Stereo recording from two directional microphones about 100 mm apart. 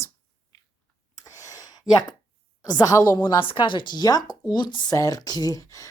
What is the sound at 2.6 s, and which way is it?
Speech, 40° left (ahead or behind).